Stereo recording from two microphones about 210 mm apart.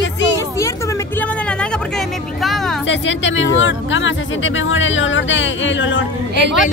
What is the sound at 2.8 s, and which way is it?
Speech, 60° left (ahead or behind).